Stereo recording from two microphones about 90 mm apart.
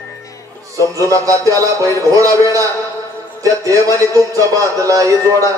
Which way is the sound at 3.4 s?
40° right (ahead or behind).